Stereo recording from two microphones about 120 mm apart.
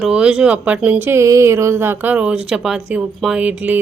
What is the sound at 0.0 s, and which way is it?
Speech, 10° right (ahead or behind).